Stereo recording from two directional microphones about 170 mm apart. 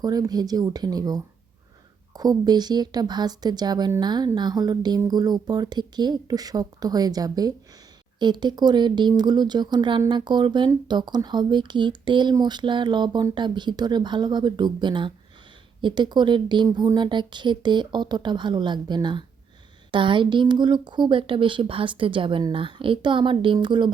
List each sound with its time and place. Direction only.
0.0 s speech: 20° right (ahead or behind)